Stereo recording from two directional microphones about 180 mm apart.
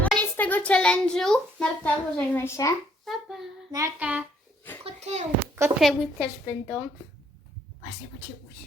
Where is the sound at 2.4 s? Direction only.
15° left (ahead or behind).